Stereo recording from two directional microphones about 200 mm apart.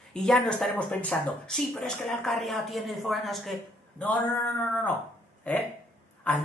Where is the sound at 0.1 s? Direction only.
5° left (ahead or behind).